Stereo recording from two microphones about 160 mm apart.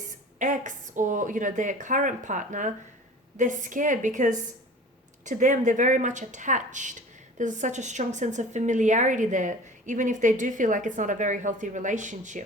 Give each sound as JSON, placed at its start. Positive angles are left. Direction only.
{"t": 0.3, "sound": "a woman's voice", "side_deg": -50}